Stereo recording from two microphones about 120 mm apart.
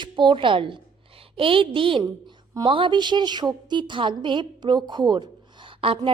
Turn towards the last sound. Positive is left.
turn(degrees=-50)  # may be behind; listen again after turning